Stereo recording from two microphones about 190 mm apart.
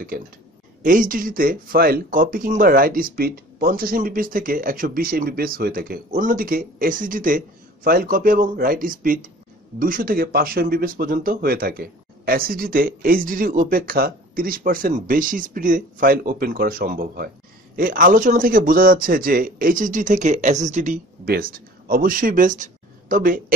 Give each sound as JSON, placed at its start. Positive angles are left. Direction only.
{"t": 0.8, "sound": "speech", "side_deg": -45}